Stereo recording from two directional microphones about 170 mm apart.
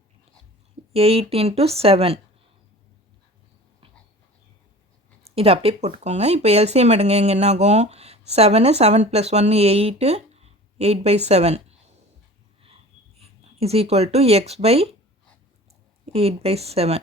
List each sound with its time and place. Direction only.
0.9 s speech: 35° right (ahead or behind)
5.2 s speech: 35° right (ahead or behind)
13.4 s speech: 35° right (ahead or behind)
16.1 s speech: 35° right (ahead or behind)